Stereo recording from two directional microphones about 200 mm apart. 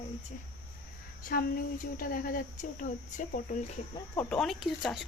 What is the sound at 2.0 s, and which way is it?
Speech, 45° left (ahead or behind).